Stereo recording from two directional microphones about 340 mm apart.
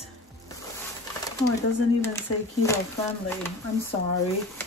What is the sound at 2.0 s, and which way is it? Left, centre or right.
Speech, centre.